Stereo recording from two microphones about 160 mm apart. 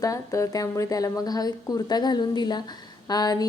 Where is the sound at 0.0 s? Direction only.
20° left (ahead or behind).